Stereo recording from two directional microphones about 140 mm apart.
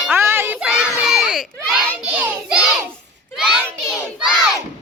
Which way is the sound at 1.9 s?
10° right (ahead or behind).